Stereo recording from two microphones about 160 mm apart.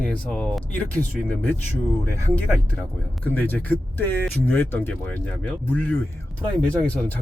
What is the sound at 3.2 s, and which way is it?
Speech, 10° left (ahead or behind).